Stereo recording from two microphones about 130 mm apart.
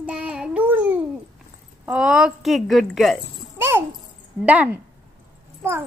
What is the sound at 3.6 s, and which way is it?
A child's voice, 20° right (ahead or behind).